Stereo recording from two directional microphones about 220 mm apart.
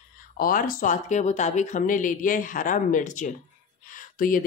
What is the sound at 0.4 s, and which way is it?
Speech, 40° left (ahead or behind).